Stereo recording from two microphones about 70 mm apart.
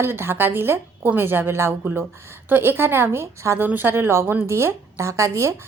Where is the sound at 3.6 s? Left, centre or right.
Right.